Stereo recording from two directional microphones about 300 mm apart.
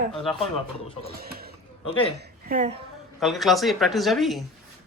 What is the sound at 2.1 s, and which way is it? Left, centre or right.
Speech, right.